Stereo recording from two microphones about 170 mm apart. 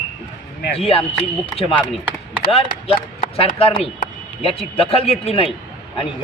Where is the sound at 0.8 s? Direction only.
35° left (ahead or behind).